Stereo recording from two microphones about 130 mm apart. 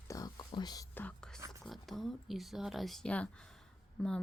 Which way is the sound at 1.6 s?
Centre (ahead or behind).